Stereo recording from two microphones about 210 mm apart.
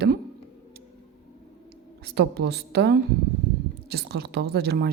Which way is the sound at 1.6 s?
50° right (ahead or behind).